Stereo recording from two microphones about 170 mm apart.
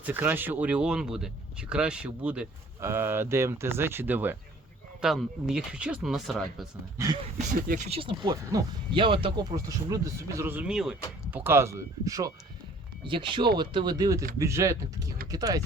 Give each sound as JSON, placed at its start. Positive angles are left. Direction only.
{"t": 0.0, "sound": "speech", "side_deg": -10}
{"t": 7.0, "sound": "speech", "side_deg": -15}
{"t": 7.9, "sound": "speech", "side_deg": -30}